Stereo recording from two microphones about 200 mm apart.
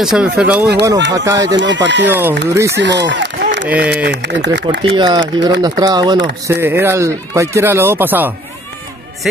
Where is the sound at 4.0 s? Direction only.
60° right (ahead or behind).